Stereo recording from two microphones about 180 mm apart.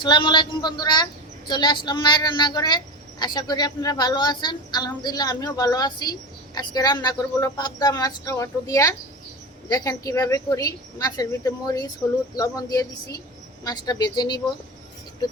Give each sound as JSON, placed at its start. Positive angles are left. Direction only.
{"t": 0.0, "sound": "a woman's voice", "side_deg": 25}